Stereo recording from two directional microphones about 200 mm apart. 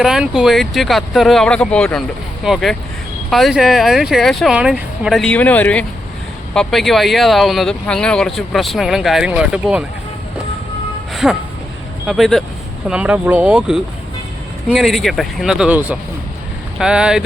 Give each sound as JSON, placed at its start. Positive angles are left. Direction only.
{"t": 0.0, "sound": "speech", "side_deg": -5}
{"t": 11.1, "sound": "music", "side_deg": 0}
{"t": 12.0, "sound": "speech", "side_deg": 0}